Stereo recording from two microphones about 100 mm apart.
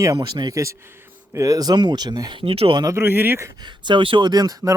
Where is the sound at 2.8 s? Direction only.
35° right (ahead or behind).